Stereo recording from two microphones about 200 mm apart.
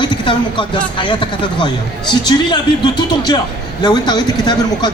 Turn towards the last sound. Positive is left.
turn(degrees=20)  # may be behind; listen again after turning